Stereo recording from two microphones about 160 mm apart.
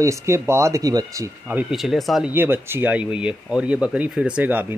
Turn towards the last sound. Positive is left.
turn(degrees=-10)  # may be behind; listen again after turning